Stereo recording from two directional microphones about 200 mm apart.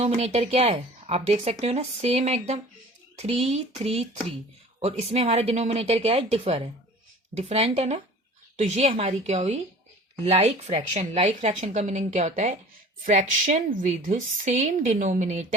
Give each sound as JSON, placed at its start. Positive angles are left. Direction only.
{"t": 0.0, "sound": "a woman's voice", "side_deg": -35}